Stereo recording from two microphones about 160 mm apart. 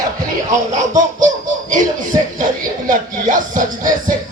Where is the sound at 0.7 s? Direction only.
50° right (ahead or behind).